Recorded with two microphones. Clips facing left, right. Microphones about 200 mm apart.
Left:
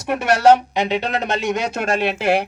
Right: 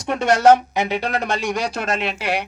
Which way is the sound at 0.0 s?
10° left (ahead or behind).